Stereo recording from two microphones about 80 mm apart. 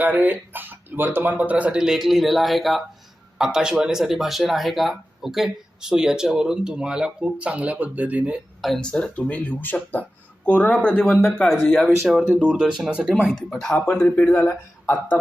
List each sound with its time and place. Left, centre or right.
0.0 s speech: right
1.8 s speech: centre
8.8 s speech: centre
11.6 s speech: centre
13.9 s speech: centre
14.3 s speech: left